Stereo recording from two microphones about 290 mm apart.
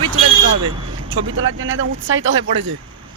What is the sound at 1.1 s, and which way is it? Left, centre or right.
Speech, right.